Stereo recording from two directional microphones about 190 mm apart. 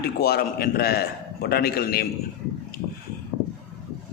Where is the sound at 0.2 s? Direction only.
55° left (ahead or behind).